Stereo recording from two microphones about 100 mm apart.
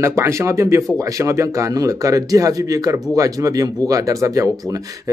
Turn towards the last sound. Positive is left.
turn(degrees=-35)  # may be behind; listen again after turning